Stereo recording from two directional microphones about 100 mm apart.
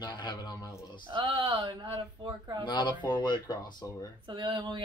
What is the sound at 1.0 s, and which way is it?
Speech, 55° right (ahead or behind).